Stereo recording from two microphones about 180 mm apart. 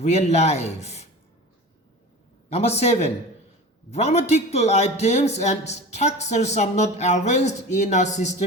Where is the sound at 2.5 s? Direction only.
35° left (ahead or behind).